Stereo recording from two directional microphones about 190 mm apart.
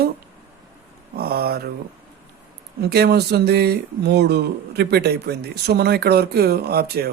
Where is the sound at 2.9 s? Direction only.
60° right (ahead or behind).